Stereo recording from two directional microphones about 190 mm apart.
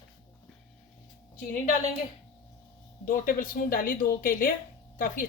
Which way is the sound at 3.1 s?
45° left (ahead or behind).